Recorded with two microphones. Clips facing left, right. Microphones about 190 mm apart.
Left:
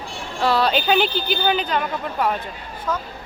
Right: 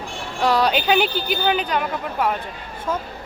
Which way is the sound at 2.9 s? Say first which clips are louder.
Right 1 dB; 25° right (ahead or behind).